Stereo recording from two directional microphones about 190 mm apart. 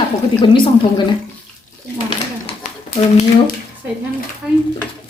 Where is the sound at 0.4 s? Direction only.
25° left (ahead or behind).